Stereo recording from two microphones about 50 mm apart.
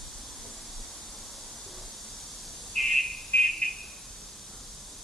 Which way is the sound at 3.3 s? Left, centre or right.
Left.